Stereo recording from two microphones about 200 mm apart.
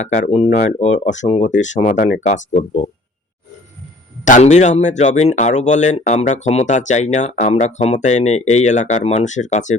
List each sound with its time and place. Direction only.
0.0 s speech: 35° left (ahead or behind)
4.3 s speech: 35° left (ahead or behind)